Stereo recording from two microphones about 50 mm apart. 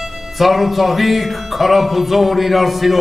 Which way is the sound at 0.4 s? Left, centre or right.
Centre.